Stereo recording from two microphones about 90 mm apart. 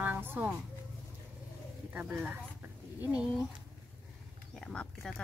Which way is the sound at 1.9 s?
20° right (ahead or behind).